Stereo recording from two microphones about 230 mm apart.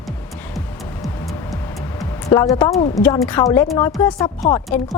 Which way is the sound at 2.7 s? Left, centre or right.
Centre.